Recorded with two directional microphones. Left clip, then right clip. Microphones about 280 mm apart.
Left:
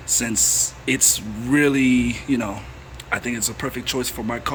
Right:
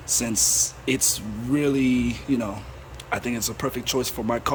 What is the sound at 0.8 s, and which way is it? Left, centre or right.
Speech, centre.